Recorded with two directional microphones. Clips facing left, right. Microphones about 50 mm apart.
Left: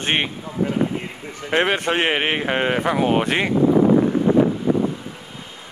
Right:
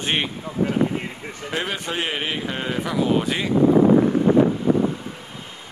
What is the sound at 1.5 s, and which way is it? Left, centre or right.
A man's voice, left.